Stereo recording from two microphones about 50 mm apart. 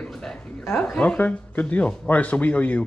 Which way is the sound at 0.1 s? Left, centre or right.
Centre.